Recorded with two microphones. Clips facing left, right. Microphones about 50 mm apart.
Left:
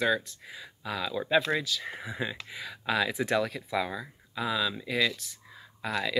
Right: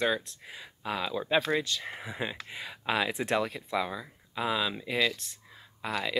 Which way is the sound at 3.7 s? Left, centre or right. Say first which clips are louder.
Even; centre.